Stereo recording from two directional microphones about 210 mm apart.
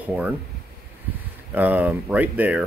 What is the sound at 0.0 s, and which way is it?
Speech, 5° right (ahead or behind).